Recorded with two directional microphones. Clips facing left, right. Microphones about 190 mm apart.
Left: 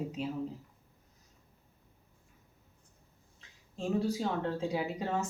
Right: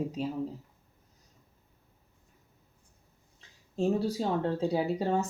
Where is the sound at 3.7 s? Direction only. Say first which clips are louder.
Right 4 dB; 35° right (ahead or behind).